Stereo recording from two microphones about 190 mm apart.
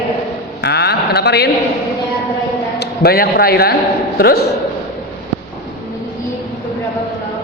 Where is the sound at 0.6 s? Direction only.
60° left (ahead or behind).